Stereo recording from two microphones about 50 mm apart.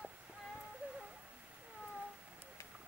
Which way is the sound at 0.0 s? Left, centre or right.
Right.